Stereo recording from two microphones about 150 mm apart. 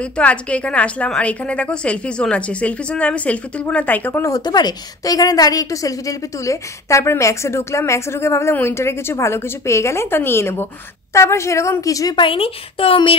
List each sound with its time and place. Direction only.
0.0 s a woman's voice: 10° left (ahead or behind); by 13.1 s 35° left (ahead or behind)